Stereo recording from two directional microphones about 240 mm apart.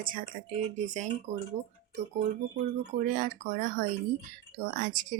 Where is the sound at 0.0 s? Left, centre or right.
Right.